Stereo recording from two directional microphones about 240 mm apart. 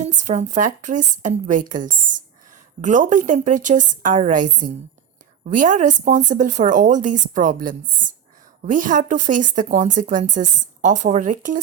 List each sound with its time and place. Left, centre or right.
0.0 s speech: right
2.8 s speech: right